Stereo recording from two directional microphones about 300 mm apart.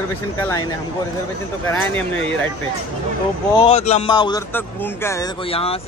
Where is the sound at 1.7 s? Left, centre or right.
Centre.